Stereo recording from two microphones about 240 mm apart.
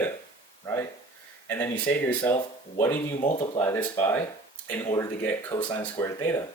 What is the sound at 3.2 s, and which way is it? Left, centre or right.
Speech, left.